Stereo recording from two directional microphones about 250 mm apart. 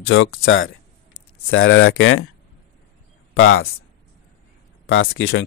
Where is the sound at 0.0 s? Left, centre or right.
Left.